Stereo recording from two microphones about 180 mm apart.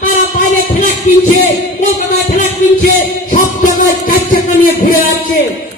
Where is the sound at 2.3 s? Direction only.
50° left (ahead or behind).